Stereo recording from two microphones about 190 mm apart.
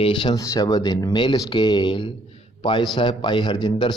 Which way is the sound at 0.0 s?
25° left (ahead or behind).